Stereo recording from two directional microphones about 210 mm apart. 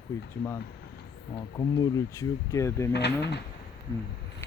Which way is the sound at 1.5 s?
15° left (ahead or behind).